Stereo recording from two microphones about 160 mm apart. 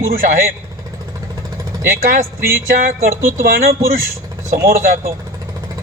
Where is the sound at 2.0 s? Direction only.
55° right (ahead or behind).